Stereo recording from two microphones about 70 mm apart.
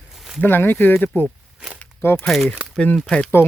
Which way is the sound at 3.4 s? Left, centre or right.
Left.